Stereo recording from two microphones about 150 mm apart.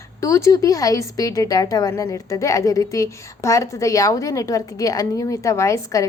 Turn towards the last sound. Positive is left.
turn(degrees=20)  # may be behind; listen again after turning